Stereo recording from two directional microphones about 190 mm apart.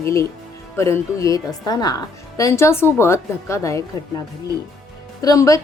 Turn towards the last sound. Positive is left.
turn(degrees=15)  # may be behind; listen again after turning